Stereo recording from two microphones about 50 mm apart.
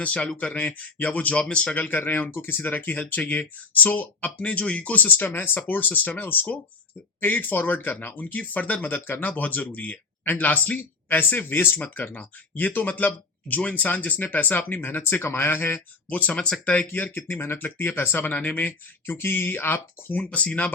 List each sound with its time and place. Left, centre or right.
0.0 s speech: left
1.7 s speech: left
11.8 s speech: left
14.8 s speech: left
16.0 s speech: left
16.3 s speech: left
16.7 s speech: left
17.6 s speech: left
18.3 s speech: left
18.5 s speech: left
19.1 s speech: left
20.3 s speech: left